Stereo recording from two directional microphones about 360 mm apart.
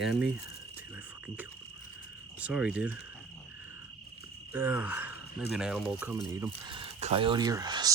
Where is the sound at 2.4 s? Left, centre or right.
Centre.